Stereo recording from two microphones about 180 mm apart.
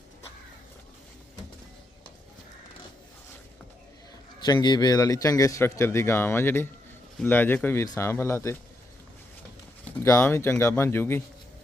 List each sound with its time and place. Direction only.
4.4 s speech: 25° left (ahead or behind)
10.0 s speech: 15° left (ahead or behind)